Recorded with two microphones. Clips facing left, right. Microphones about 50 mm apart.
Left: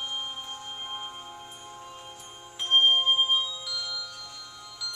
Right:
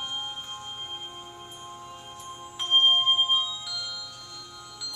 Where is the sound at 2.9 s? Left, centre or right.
Centre.